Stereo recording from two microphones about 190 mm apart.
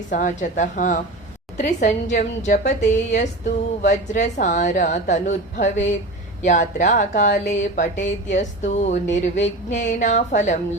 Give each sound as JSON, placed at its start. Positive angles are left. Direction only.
{"t": 0.1, "sound": "a woman's voice", "side_deg": 40}